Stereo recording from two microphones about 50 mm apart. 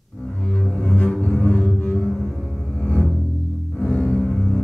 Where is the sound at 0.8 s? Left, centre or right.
Left.